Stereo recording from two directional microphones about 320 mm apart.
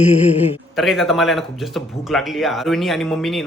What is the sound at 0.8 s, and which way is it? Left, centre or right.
Speech, centre.